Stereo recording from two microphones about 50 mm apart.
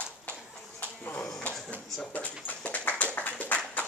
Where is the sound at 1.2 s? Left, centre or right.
Centre.